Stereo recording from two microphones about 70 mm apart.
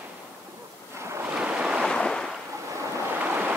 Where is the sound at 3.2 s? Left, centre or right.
Right.